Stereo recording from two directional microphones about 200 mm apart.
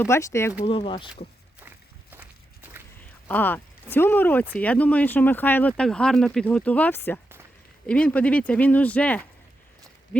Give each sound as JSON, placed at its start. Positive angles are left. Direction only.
{"t": 0.0, "sound": "speech", "side_deg": 15}
{"t": 0.6, "sound": "speech", "side_deg": 25}
{"t": 2.1, "sound": "walk", "side_deg": -10}
{"t": 3.2, "sound": "speech", "side_deg": 10}